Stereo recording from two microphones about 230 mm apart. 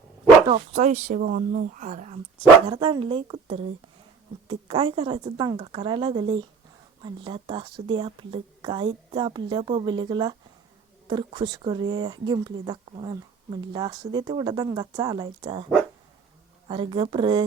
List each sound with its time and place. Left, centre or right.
0.4 s speech: right